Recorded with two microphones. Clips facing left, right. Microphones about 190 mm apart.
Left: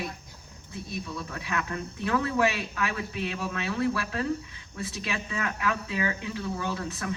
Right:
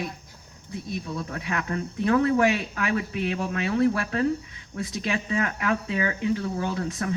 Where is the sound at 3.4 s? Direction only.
55° right (ahead or behind).